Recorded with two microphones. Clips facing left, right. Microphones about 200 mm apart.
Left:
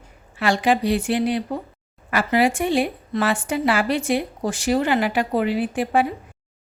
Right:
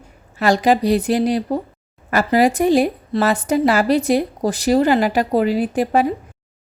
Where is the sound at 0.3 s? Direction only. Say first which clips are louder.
Right 4 dB; 40° right (ahead or behind).